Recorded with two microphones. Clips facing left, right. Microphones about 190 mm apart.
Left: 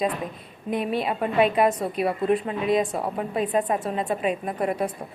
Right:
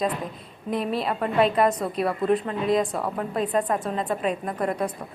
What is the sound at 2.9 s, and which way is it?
Speech, 25° left (ahead or behind).